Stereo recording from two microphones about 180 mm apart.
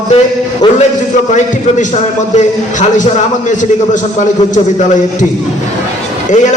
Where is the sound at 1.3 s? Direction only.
40° left (ahead or behind).